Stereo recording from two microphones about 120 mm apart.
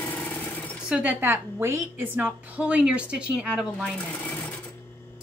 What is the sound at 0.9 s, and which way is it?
A woman's voice, 10° right (ahead or behind).